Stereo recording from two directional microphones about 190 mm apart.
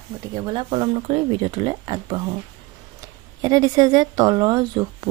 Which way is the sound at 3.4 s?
20° right (ahead or behind).